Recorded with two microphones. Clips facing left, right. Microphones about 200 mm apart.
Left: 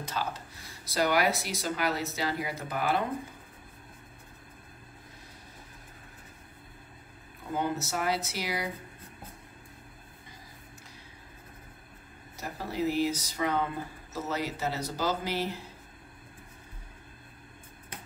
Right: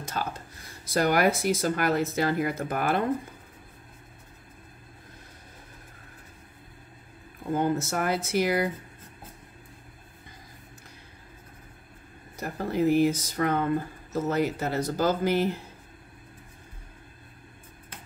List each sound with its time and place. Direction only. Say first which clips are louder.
0.0 s speech: right 2 dB; 50° right (ahead or behind)
7.5 s speech: right 5 dB; 50° right (ahead or behind)
12.4 s speech: right 6 dB; 55° right (ahead or behind)